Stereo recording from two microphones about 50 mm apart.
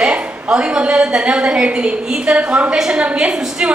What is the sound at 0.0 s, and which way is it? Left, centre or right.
A woman's voice, centre.